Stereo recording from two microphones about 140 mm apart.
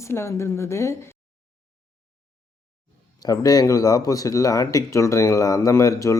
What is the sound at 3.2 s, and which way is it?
Speech, 25° left (ahead or behind).